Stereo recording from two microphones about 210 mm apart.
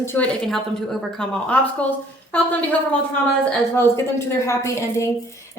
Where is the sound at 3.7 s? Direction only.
15° left (ahead or behind).